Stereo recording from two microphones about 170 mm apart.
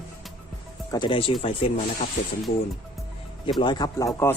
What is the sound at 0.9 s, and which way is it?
Speech, 25° left (ahead or behind).